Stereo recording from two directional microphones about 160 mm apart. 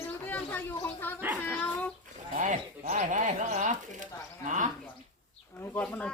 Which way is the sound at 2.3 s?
55° right (ahead or behind).